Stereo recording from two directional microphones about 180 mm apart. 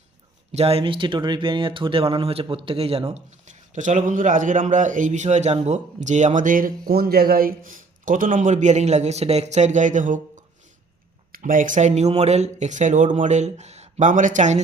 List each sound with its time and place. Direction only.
0.5 s speech: 35° right (ahead or behind)